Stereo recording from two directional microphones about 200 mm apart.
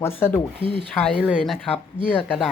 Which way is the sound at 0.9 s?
5° left (ahead or behind).